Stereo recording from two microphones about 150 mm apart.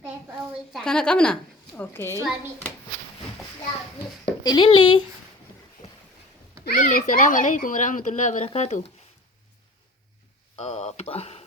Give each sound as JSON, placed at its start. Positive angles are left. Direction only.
{"t": 0.7, "sound": "a woman's voice", "side_deg": 5}
{"t": 4.4, "sound": "speech", "side_deg": 30}
{"t": 6.7, "sound": "speech", "side_deg": 65}
{"t": 10.6, "sound": "speech", "side_deg": 45}